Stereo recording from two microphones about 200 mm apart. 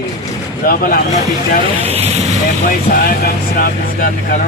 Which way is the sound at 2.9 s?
45° left (ahead or behind).